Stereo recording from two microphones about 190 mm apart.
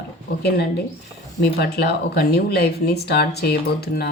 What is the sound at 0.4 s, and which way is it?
Speech, 60° left (ahead or behind).